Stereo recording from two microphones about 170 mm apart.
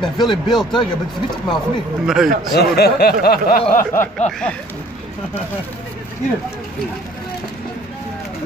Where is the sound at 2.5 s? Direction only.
70° left (ahead or behind).